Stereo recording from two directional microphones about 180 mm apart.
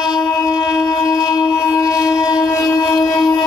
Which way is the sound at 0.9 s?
20° left (ahead or behind).